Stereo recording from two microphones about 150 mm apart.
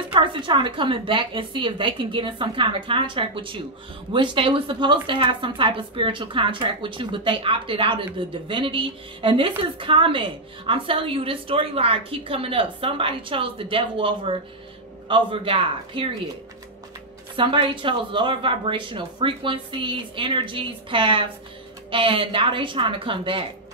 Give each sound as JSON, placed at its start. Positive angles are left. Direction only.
{"t": 0.1, "sound": "a woman's voice", "side_deg": -35}
{"t": 17.4, "sound": "a woman's voice", "side_deg": -35}